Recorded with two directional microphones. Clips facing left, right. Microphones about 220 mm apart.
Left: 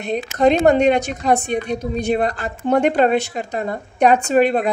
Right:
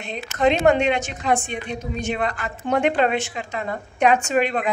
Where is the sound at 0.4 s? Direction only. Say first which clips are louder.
Left 3 dB; 40° left (ahead or behind).